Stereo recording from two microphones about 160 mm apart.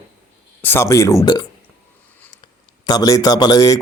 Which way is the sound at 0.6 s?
15° left (ahead or behind).